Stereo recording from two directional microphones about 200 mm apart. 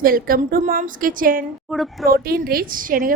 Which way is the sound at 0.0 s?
45° right (ahead or behind).